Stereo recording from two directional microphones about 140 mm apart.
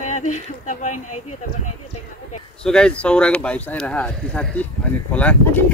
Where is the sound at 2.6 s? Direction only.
5° left (ahead or behind).